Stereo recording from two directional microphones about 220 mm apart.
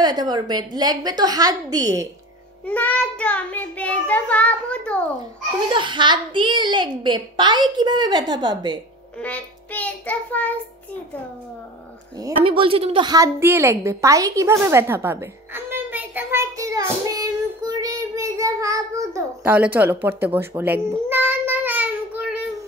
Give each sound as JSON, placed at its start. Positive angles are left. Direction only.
{"t": 0.0, "sound": "a woman's voice", "side_deg": -20}
{"t": 2.6, "sound": "child singing", "side_deg": 5}
{"t": 5.7, "sound": "a child's voice", "side_deg": -20}
{"t": 9.2, "sound": "child singing", "side_deg": 5}
{"t": 12.2, "sound": "a sound", "side_deg": -25}